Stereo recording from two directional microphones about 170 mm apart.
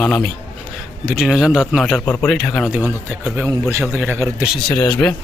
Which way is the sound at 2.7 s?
10° right (ahead or behind).